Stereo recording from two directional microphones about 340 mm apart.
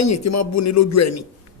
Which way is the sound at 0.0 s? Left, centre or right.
Left.